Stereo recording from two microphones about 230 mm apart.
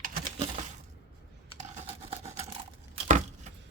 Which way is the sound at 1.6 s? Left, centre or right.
Right.